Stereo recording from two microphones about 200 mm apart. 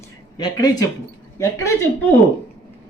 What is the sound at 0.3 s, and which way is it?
A woman's voice, 20° left (ahead or behind).